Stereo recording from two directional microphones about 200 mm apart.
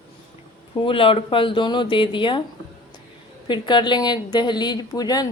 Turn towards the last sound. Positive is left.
turn(degrees=20)  # may be behind; listen again after turning